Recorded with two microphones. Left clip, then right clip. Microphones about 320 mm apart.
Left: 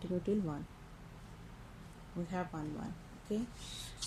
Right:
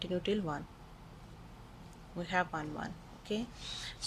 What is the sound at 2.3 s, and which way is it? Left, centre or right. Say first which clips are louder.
Speech: right 8 dB; right.